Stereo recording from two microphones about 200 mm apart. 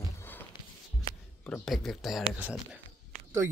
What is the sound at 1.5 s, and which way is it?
Speech, centre (ahead or behind).